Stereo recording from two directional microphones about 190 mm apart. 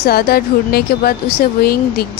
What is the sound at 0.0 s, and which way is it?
Speech, 55° left (ahead or behind).